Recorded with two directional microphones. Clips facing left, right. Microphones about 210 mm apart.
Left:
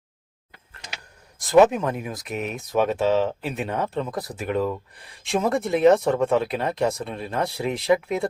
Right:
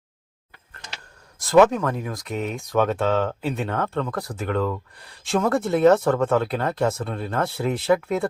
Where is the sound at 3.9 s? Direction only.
20° left (ahead or behind).